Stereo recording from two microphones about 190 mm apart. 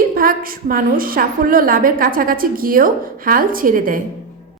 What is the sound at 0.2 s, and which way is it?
A woman's voice, 50° right (ahead or behind).